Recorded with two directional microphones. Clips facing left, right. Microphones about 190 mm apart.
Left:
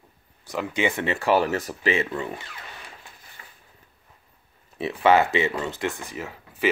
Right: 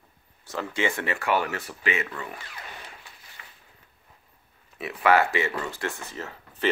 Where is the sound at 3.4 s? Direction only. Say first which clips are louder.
Left 1 dB; 35° left (ahead or behind).